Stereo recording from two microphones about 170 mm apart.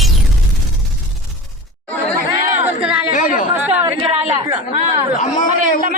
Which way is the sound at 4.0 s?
35° right (ahead or behind).